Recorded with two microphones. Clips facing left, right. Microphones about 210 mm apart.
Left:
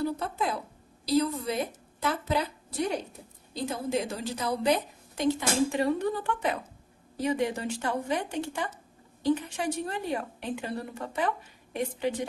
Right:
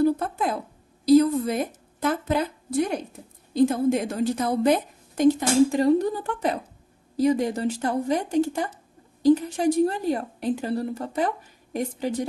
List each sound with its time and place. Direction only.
0.2 s a woman's voice: 50° right (ahead or behind)
3.5 s a woman's voice: 50° right (ahead or behind)